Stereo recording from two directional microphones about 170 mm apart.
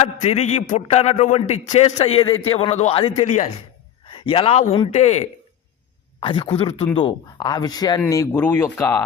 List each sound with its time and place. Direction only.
0.0 s a man's voice: 40° left (ahead or behind)
6.1 s a man's voice: 30° left (ahead or behind); by 9.0 s 10° left (ahead or behind)